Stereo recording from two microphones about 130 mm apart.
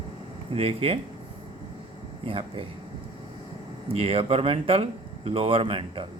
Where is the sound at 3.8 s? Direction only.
45° right (ahead or behind).